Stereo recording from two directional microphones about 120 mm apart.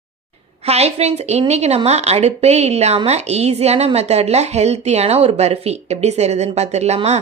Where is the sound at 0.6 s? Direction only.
60° right (ahead or behind).